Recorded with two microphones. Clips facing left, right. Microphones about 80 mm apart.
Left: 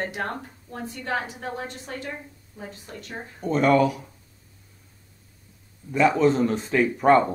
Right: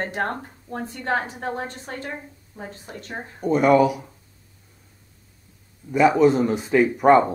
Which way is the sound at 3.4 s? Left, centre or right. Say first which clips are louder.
Right 3 dB; centre.